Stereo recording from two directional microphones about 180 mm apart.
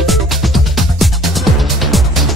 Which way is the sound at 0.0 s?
Centre (ahead or behind).